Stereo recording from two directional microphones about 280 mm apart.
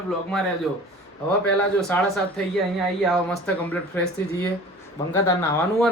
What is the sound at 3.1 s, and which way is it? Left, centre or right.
Speech, centre.